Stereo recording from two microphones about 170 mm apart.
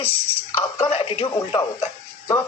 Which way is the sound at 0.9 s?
35° left (ahead or behind).